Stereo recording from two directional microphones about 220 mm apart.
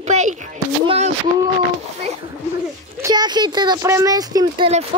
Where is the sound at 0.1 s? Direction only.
30° right (ahead or behind).